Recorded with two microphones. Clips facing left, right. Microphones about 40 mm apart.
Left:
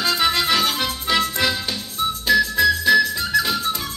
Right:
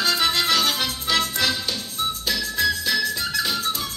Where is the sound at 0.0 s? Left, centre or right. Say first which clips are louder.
Left 2 dB; centre.